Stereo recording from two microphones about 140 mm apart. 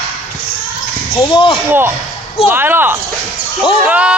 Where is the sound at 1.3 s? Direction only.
40° left (ahead or behind).